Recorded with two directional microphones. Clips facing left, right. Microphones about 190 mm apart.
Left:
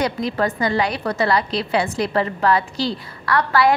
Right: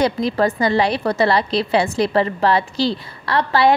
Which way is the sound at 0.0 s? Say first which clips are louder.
Right 4 dB; 30° right (ahead or behind).